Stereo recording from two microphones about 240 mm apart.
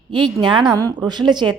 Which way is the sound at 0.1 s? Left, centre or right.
Centre.